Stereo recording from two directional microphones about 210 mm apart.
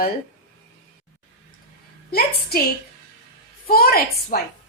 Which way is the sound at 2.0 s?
45° left (ahead or behind).